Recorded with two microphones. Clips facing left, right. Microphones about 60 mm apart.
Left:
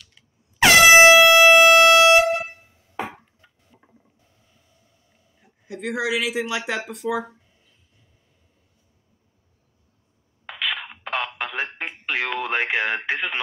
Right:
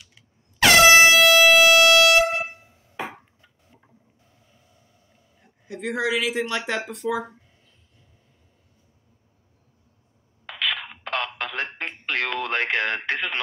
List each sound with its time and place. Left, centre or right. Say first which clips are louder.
0.6 s air horn: left 2 dB; centre
1.7 s music: left 3 dB; left
5.4 s speech: even; centre
10.4 s telephone: even; centre